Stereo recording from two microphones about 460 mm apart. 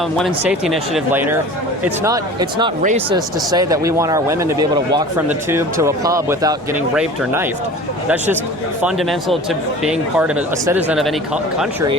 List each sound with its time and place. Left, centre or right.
0.3 s speech: centre
8.8 s speech: centre